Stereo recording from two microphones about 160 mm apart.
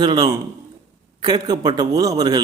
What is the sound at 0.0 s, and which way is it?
A man's voice, 25° right (ahead or behind).